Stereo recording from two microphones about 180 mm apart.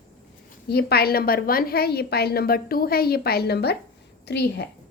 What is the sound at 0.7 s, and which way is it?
A woman's voice, 60° left (ahead or behind).